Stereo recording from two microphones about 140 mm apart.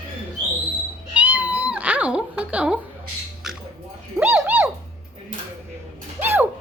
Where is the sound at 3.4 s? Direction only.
5° right (ahead or behind).